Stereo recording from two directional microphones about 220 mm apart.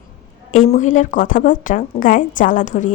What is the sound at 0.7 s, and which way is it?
A woman's voice, 35° left (ahead or behind).